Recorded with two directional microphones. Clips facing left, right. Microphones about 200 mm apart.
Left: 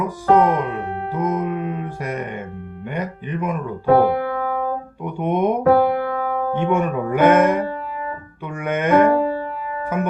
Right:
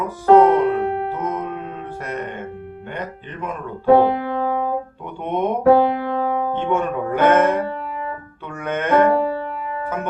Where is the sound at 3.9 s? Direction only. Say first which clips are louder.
Even; 20° right (ahead or behind).